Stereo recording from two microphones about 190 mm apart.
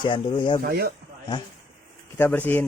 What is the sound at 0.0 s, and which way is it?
Speech, 25° left (ahead or behind).